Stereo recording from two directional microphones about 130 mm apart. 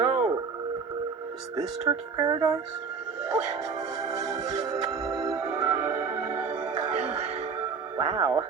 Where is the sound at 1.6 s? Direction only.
55° right (ahead or behind).